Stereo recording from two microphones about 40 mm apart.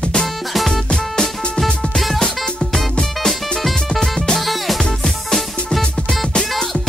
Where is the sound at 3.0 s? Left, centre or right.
Centre.